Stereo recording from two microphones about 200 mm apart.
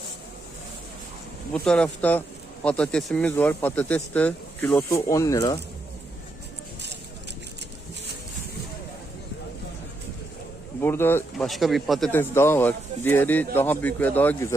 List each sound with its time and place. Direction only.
1.5 s speech: 5° left (ahead or behind)
10.8 s speech: 10° left (ahead or behind)
11.4 s speech: centre (ahead or behind)